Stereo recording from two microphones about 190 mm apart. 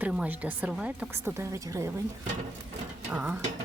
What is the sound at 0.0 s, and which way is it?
A woman's voice, 5° right (ahead or behind).